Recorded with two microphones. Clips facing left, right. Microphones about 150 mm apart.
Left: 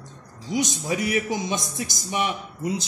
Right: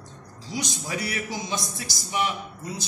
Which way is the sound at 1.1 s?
20° left (ahead or behind).